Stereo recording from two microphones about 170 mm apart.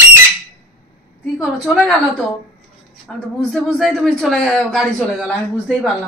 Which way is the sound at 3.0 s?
Centre (ahead or behind).